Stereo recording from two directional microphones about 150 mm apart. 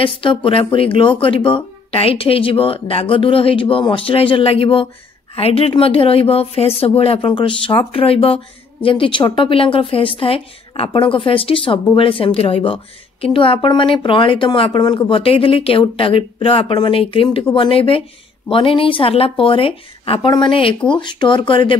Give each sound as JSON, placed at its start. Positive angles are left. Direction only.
{"t": 0.0, "sound": "speech", "side_deg": 35}